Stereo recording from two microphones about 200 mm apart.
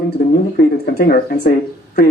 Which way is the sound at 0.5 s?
50° left (ahead or behind).